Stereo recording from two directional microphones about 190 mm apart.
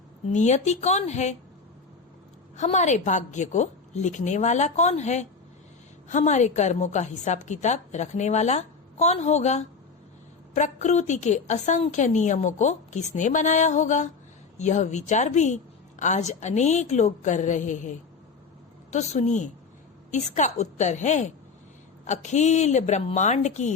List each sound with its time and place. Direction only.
0.3 s a woman's voice: 35° left (ahead or behind)
2.6 s a woman's voice: 40° left (ahead or behind)